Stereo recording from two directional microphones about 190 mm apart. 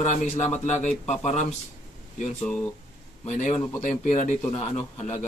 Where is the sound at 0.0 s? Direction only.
35° left (ahead or behind).